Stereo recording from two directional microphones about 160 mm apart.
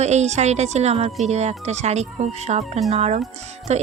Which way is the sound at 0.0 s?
45° right (ahead or behind).